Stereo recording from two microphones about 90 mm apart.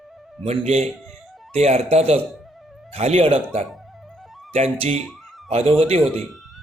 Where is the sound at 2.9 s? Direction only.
90° right.